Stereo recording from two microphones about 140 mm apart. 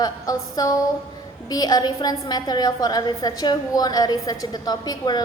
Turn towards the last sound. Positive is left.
turn(degrees=30)  # may be behind; listen again after turning